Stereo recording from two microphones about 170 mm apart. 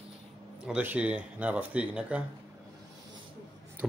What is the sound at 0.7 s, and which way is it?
Speech, 10° right (ahead or behind).